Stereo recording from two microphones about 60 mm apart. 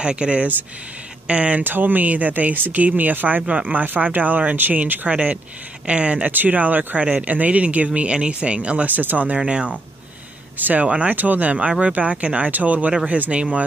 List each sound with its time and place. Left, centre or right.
0.0 s speech: centre
1.6 s speech: right
6.2 s speech: right